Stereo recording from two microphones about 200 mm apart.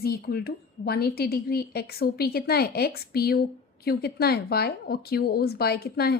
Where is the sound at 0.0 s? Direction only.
50° left (ahead or behind).